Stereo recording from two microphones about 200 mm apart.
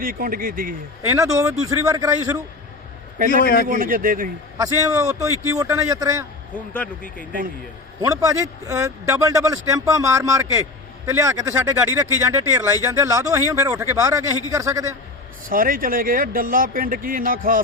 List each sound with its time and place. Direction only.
0.0 s speech: 45° right (ahead or behind)
1.0 s a man's voice: 15° right (ahead or behind)
3.2 s a man's voice: 40° right (ahead or behind)
3.4 s speech: 50° left (ahead or behind)
3.7 s speech: 45° right (ahead or behind)
4.5 s a man's voice: 15° right (ahead or behind)
8.0 s a man's voice: 15° right (ahead or behind)
15.4 s speech: 45° right (ahead or behind)